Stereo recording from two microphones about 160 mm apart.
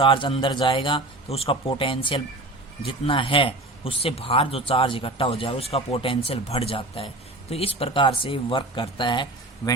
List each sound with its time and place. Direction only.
0.0 s speech: 35° left (ahead or behind)